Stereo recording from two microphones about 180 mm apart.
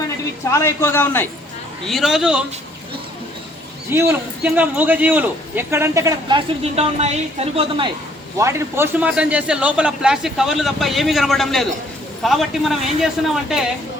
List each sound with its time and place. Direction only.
0.5 s a man's voice: 15° left (ahead or behind)
1.8 s a man's voice: centre (ahead or behind)
3.9 s a man's voice: 10° right (ahead or behind); by 7.9 s 30° right (ahead or behind)
8.4 s a man's voice: 15° right (ahead or behind)